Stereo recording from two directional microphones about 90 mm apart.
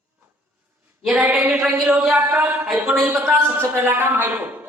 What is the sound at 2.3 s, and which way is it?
Speech, 20° right (ahead or behind).